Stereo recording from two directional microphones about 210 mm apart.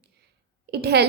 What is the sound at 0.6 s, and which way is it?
Speech, 50° right (ahead or behind).